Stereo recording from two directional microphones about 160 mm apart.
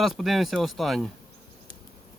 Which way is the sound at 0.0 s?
Centre (ahead or behind).